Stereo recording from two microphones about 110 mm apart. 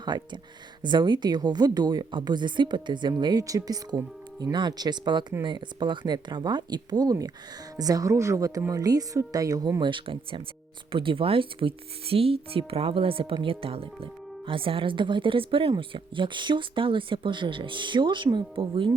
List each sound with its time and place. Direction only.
0.0 s speech: 45° right (ahead or behind)